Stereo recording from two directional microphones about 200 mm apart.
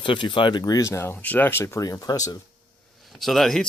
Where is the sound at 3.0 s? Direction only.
Centre (ahead or behind).